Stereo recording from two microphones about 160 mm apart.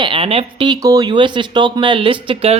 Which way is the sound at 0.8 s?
20° right (ahead or behind).